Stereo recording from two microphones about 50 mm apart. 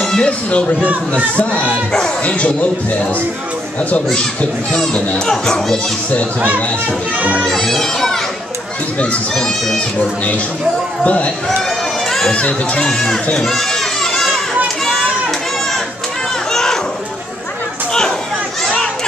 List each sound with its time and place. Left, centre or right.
0.0 s a sound: centre
1.1 s speech: left
4.1 s a child's voice: centre
7.4 s a child's voice: centre
9.3 s speech: centre
9.8 s speech: left
12.8 s a child's voice: centre
13.4 s crowd: centre
16.5 s a sound: centre